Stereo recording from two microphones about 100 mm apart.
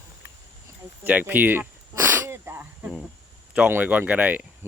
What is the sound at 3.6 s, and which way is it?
Speech, 15° right (ahead or behind).